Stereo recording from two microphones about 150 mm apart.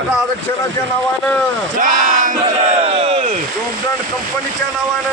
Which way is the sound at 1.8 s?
60° right (ahead or behind).